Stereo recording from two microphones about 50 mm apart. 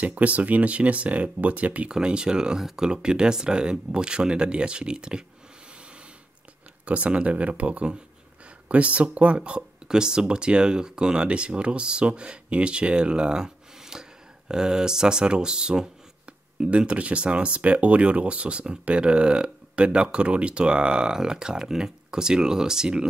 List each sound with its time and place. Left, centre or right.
0.0 s speech: right
1.9 s speech: centre
6.9 s speech: right